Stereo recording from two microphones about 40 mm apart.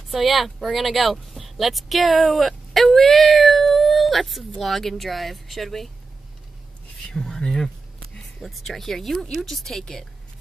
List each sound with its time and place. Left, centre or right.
0.1 s speech: centre
7.1 s speech: centre